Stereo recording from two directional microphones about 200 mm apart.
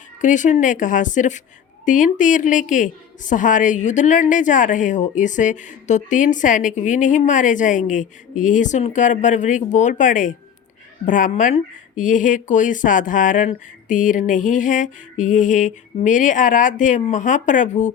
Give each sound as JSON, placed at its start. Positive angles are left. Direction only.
{"t": 0.2, "sound": "a woman's voice", "side_deg": 40}